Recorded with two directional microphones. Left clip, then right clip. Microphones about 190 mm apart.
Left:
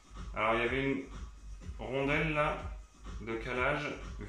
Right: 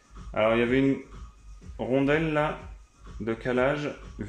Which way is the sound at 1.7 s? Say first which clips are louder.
Right 8 dB; 45° right (ahead or behind).